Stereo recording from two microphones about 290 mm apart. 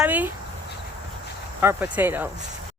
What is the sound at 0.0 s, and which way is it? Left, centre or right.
Insect, centre.